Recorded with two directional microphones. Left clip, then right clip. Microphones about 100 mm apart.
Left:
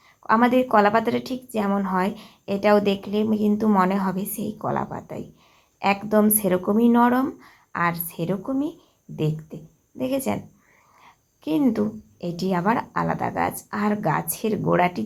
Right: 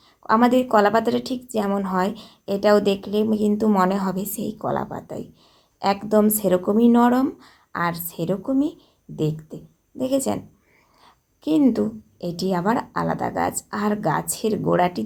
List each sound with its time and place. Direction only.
0.2 s a woman's voice: 15° right (ahead or behind)
11.0 s a sound: 20° right (ahead or behind)
11.7 s a woman's voice: 15° right (ahead or behind)